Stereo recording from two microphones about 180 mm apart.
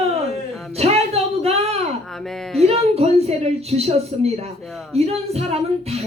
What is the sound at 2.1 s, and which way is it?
Speech, centre (ahead or behind).